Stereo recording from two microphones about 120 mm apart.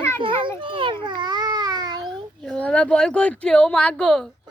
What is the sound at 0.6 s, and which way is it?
Speech, 45° right (ahead or behind).